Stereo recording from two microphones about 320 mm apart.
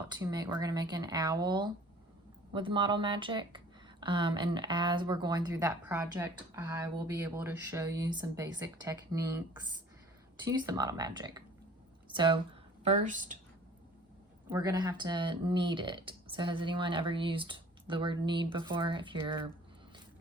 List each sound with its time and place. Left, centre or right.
0.1 s speech: centre
10.4 s speech: centre
14.5 s speech: centre